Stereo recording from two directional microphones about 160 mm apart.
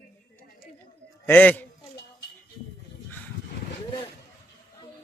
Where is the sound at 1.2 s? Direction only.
10° left (ahead or behind).